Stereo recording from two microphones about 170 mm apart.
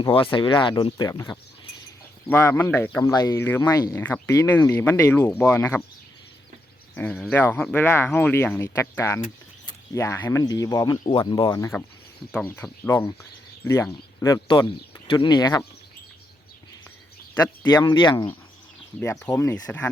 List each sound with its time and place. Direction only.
0.0 s speech: 30° left (ahead or behind); by 5.8 s 10° left (ahead or behind)
6.9 s speech: 10° left (ahead or behind)
12.3 s speech: 10° left (ahead or behind)
14.4 s speech: 25° left (ahead or behind)
17.7 s speech: 25° left (ahead or behind)
19.3 s speech: 20° left (ahead or behind)